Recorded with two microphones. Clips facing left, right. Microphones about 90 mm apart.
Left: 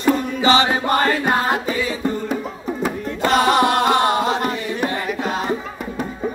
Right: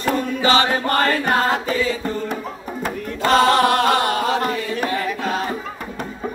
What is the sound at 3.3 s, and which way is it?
Chant, 15° left (ahead or behind).